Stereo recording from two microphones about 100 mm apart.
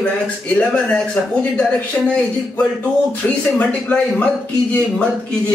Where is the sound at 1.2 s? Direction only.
20° left (ahead or behind).